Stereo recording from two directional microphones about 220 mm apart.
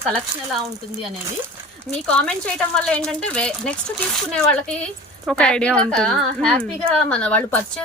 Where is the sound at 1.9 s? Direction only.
5° left (ahead or behind).